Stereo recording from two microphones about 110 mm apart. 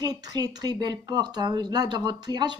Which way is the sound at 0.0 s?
40° right (ahead or behind).